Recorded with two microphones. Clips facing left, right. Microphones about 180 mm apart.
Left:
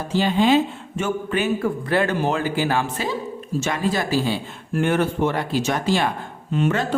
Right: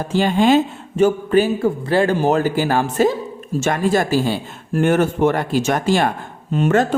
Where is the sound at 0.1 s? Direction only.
50° right (ahead or behind).